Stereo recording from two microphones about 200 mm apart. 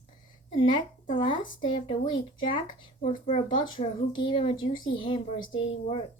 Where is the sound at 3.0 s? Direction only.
35° left (ahead or behind).